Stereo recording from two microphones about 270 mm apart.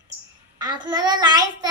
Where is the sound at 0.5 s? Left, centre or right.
Centre.